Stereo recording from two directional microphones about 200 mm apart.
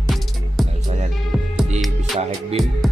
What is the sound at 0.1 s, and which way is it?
Music, centre (ahead or behind).